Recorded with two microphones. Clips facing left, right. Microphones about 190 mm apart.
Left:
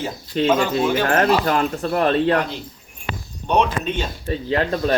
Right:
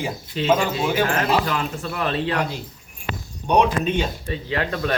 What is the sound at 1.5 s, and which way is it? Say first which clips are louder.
Speech: left 6 dB; 45° left (ahead or behind).